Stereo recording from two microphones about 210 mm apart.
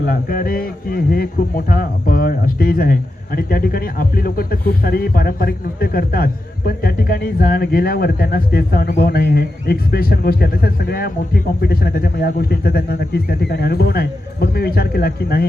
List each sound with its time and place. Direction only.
0.0 s speech: 45° left (ahead or behind)